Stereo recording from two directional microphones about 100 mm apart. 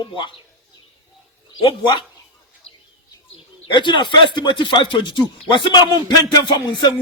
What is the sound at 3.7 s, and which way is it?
Music, 50° left (ahead or behind).